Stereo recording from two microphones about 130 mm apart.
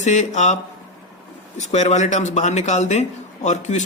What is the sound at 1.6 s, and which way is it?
A man's voice, 65° left (ahead or behind).